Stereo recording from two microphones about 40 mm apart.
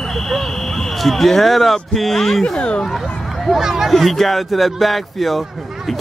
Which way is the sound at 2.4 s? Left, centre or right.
Left.